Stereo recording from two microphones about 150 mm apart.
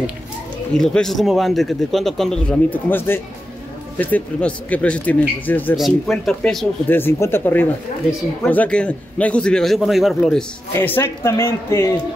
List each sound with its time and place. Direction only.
0.7 s a man's voice: 5° left (ahead or behind)
5.8 s a man's voice: centre (ahead or behind)
6.9 s a man's voice: 15° left (ahead or behind)
10.7 s speech: 15° left (ahead or behind)